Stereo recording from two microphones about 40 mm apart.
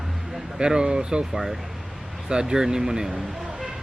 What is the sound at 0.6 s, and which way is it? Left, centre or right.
Speech, right.